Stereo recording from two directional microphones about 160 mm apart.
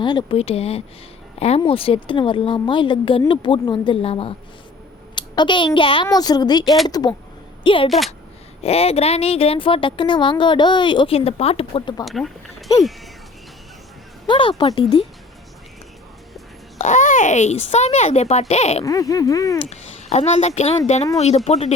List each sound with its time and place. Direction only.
0.0 s a child's voice: 30° left (ahead or behind)
7.9 s speech: centre (ahead or behind)
8.6 s speech: 40° left (ahead or behind)
12.0 s speech: centre (ahead or behind)
14.3 s speech: 30° left (ahead or behind)
16.7 s speech: 50° left (ahead or behind)
18.9 s a child's voice: 20° left (ahead or behind)
19.7 s a woman's voice: 45° left (ahead or behind)